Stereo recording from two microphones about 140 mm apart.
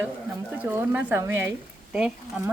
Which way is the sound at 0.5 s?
15° right (ahead or behind).